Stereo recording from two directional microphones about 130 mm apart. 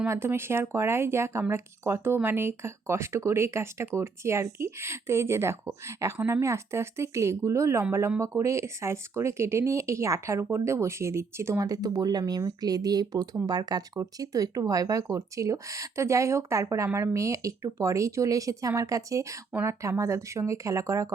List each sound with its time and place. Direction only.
0.1 s speech: 20° right (ahead or behind)